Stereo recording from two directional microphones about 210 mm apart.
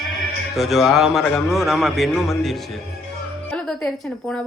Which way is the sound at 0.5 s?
Centre (ahead or behind).